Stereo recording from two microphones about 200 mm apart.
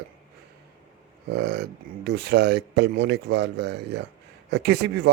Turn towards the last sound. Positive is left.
turn(degrees=-55)  # may be behind; listen again after turning